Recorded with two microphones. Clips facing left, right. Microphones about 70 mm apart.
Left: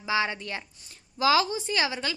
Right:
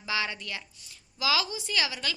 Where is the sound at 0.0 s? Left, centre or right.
Left.